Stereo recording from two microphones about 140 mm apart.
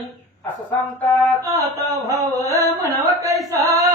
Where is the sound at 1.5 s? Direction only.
20° right (ahead or behind).